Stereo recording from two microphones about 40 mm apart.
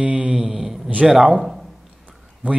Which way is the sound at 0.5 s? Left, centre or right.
Centre.